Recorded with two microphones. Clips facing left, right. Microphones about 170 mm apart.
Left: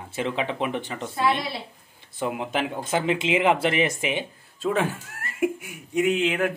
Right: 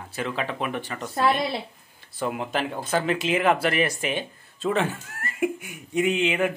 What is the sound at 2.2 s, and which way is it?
Speech, 15° left (ahead or behind).